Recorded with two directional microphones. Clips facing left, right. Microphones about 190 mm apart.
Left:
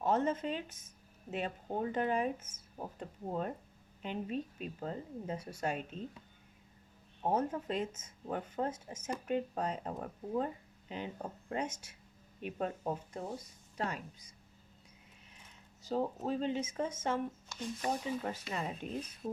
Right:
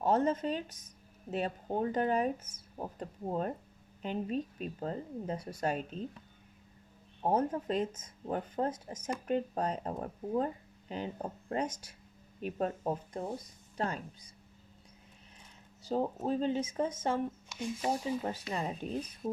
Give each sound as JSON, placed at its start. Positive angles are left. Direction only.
{"t": 0.0, "sound": "speech", "side_deg": -35}
{"t": 7.2, "sound": "speech", "side_deg": -35}
{"t": 15.8, "sound": "speech", "side_deg": -35}
{"t": 17.6, "sound": "speech", "side_deg": -10}
{"t": 18.3, "sound": "speech", "side_deg": -35}